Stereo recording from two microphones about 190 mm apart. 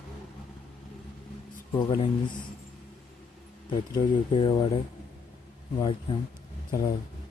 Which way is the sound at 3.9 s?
25° left (ahead or behind).